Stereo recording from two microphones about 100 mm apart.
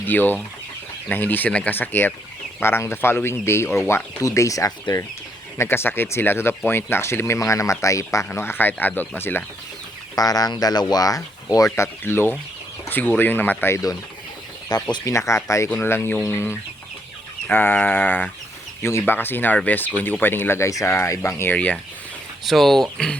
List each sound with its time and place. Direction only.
0.0 s speech: 20° left (ahead or behind); by 5.0 s 35° left (ahead or behind)
5.5 s speech: 25° left (ahead or behind)
10.2 s speech: 40° left (ahead or behind)
12.0 s speech: 25° left (ahead or behind)
14.7 s speech: 45° left (ahead or behind)
15.1 s speech: 30° left (ahead or behind)
17.5 s a sound: 20° left (ahead or behind)
18.8 s speech: 25° left (ahead or behind)
22.4 s speech: centre (ahead or behind)